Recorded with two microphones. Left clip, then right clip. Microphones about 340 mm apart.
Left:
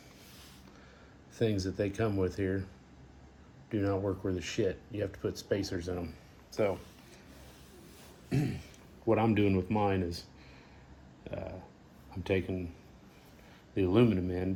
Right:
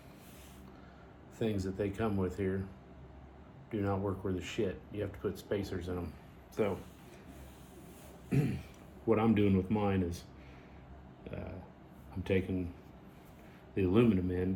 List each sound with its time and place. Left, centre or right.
1.4 s speech: left
3.7 s speech: left
8.3 s speech: left
11.2 s burping: left
12.2 s speech: left
13.7 s speech: left